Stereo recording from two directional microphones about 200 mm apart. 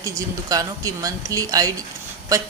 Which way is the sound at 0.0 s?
15° right (ahead or behind).